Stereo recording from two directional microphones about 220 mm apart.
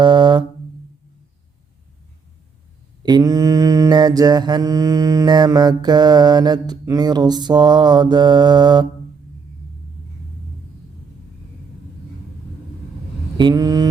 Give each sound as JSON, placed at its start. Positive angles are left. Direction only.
{"t": 0.0, "sound": "a sound", "side_deg": -20}
{"t": 3.0, "sound": "mantra", "side_deg": -15}
{"t": 13.3, "sound": "mantra", "side_deg": -20}